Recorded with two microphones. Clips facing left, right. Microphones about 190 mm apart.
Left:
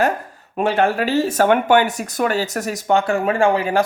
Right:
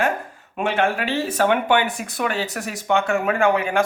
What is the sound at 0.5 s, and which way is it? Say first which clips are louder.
Speech: left 4 dB; 40° left (ahead or behind).